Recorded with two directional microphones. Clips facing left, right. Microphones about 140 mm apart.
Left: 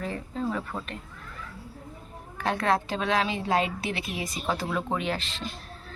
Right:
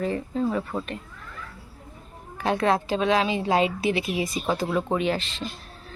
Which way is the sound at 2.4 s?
Centre (ahead or behind).